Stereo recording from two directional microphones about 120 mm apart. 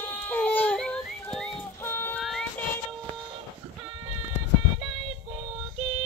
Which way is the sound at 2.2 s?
5° left (ahead or behind).